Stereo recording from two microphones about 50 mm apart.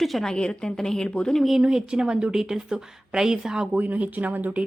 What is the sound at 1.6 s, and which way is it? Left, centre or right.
A woman's voice, centre.